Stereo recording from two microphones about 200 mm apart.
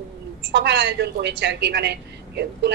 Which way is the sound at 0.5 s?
60° right (ahead or behind).